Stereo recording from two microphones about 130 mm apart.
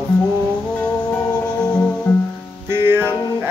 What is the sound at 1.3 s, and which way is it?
Music, 30° left (ahead or behind).